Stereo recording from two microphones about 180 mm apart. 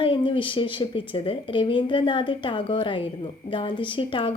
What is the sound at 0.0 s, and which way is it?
A woman's voice, 30° left (ahead or behind).